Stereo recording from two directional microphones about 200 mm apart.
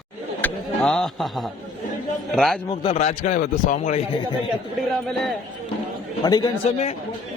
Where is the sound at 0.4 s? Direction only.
5° left (ahead or behind).